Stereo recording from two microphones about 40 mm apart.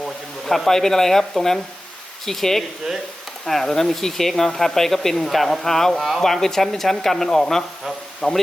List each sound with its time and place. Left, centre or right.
0.0 s speech: centre
6.2 s speech: centre